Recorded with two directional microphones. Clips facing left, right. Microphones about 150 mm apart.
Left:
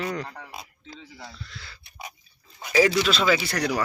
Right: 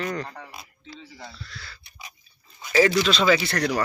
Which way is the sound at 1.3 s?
20° left (ahead or behind).